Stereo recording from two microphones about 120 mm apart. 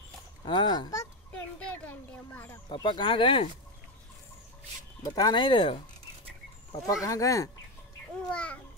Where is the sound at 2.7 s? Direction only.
40° left (ahead or behind).